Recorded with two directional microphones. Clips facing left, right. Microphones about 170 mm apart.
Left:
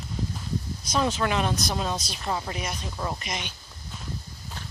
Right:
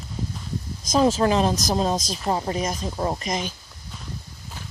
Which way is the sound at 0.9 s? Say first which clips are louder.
Right 7 dB; 40° right (ahead or behind).